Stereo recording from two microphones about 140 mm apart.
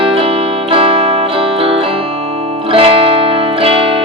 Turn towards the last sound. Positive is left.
turn(degrees=-40)  # may be behind; listen again after turning